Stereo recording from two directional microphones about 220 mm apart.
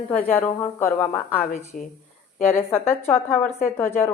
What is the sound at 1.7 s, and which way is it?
Speech, 35° left (ahead or behind).